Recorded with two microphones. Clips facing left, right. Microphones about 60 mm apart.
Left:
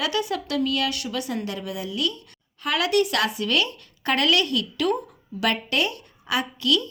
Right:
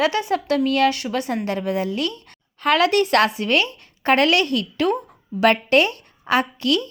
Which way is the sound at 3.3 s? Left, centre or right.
Right.